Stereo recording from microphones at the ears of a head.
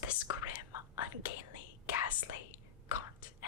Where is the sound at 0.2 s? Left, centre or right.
Left.